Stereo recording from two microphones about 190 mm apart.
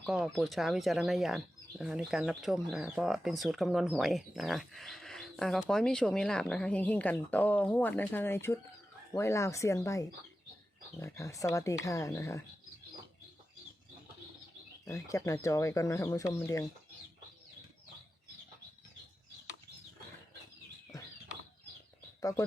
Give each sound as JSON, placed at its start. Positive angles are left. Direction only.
{"t": 0.0, "sound": "speech", "side_deg": 0}
{"t": 14.8, "sound": "speech", "side_deg": 15}
{"t": 22.2, "sound": "speech", "side_deg": 20}